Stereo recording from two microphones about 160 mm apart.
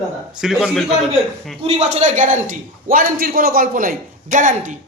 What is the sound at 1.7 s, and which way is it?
Speech, 50° right (ahead or behind).